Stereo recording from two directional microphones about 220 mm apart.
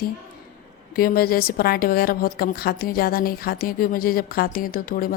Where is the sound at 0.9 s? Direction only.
40° left (ahead or behind).